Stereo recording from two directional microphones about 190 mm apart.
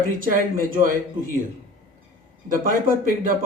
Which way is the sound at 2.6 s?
45° right (ahead or behind).